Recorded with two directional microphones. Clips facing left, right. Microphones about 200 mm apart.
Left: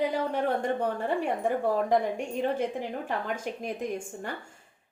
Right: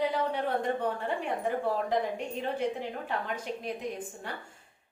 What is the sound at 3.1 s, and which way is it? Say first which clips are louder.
A woman's voice: left 2 dB; 45° left (ahead or behind).